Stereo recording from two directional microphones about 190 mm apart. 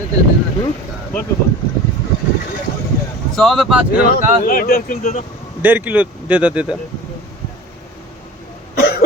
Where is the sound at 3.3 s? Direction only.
Centre (ahead or behind).